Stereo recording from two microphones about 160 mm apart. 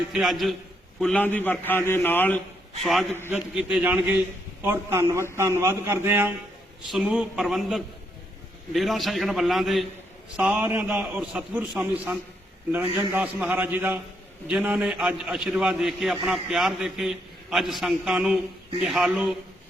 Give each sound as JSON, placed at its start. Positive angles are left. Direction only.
{"t": 0.1, "sound": "a man's voice", "side_deg": 0}
{"t": 2.8, "sound": "a man's voice", "side_deg": 0}